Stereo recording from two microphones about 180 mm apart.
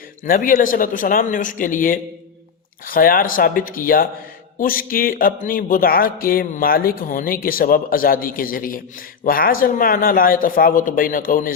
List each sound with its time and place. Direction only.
0.3 s speech: 50° left (ahead or behind)